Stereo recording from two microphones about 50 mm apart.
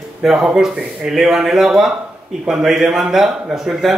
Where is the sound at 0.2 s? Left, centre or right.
Centre.